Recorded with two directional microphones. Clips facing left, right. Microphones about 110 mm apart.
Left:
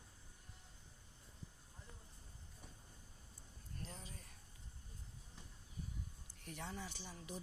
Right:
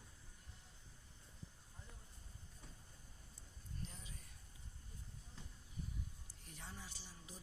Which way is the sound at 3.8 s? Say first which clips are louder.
Left 3 dB; 40° left (ahead or behind).